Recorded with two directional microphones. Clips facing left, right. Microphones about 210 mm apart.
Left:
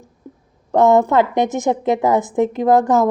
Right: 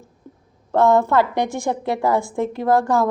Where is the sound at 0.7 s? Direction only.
20° left (ahead or behind).